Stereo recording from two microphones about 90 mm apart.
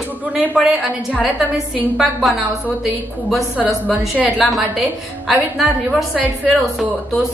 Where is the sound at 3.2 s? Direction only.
5° right (ahead or behind).